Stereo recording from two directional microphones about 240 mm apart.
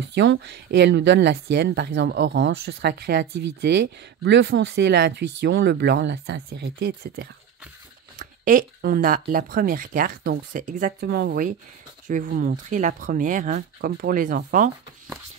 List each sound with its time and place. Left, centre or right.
0.0 s speech: right